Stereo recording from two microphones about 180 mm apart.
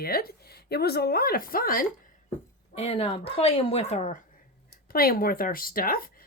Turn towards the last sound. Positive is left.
turn(degrees=55)  # may be behind; listen again after turning